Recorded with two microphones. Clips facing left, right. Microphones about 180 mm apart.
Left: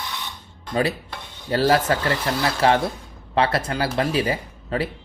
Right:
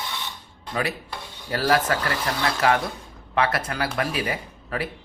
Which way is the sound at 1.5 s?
30° left (ahead or behind).